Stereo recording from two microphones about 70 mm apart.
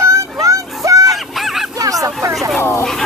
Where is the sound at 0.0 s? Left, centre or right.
Right.